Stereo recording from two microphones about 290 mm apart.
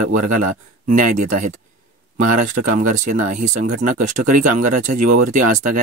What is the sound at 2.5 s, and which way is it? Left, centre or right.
Speech, right.